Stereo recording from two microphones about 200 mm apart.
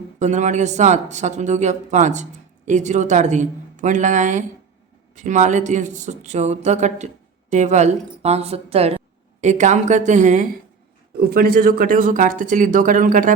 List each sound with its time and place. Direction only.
0.2 s speech: 35° right (ahead or behind)
11.2 s speech: 50° right (ahead or behind)